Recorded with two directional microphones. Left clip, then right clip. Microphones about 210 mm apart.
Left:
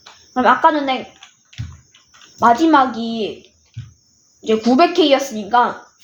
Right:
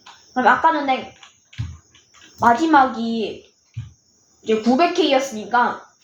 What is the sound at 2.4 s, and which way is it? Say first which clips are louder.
Speech: left 2 dB; 50° left (ahead or behind).